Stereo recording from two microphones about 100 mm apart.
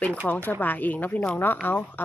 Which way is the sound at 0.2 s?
10° left (ahead or behind).